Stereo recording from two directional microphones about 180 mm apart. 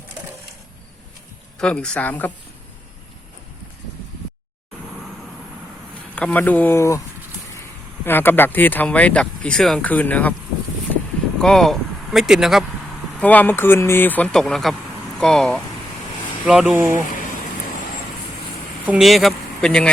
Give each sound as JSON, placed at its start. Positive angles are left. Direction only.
{"t": 1.5, "sound": "speech", "side_deg": 5}
{"t": 6.1, "sound": "speech", "side_deg": 5}
{"t": 8.0, "sound": "speech", "side_deg": 10}
{"t": 11.3, "sound": "speech", "side_deg": 5}
{"t": 13.1, "sound": "speech", "side_deg": 10}
{"t": 17.1, "sound": "vehicle", "side_deg": 50}
{"t": 18.9, "sound": "speech", "side_deg": 0}